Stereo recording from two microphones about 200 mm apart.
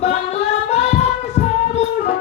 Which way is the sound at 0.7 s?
35° left (ahead or behind).